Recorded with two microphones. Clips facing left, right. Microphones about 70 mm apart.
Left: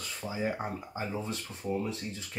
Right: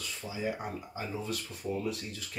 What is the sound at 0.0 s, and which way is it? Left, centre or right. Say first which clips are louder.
Speech: left 2 dB; left.